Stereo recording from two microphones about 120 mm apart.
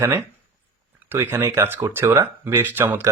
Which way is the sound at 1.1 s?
20° right (ahead or behind).